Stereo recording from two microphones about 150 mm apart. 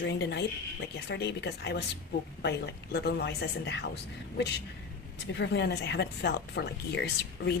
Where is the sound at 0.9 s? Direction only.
90° left.